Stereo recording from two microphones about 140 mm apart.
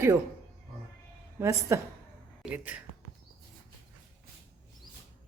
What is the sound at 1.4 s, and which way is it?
Speech, 20° right (ahead or behind).